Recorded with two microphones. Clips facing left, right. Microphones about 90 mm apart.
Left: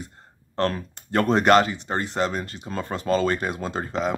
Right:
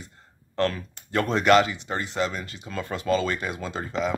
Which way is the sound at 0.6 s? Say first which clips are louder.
Left 1 dB; 40° left (ahead or behind).